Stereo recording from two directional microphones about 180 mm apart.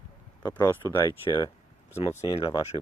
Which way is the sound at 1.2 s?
25° left (ahead or behind).